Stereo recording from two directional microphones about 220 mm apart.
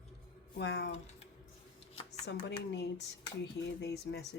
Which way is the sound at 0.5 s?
50° left (ahead or behind).